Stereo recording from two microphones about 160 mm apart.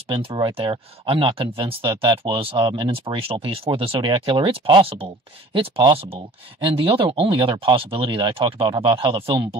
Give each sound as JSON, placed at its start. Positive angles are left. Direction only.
{"t": 0.1, "sound": "speech", "side_deg": -35}